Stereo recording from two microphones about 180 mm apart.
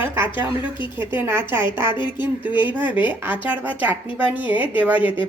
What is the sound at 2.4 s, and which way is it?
Speech, 10° right (ahead or behind).